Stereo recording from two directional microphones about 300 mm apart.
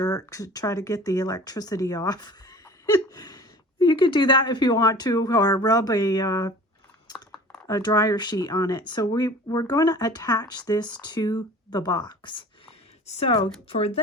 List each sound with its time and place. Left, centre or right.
0.0 s speech: centre
7.7 s speech: centre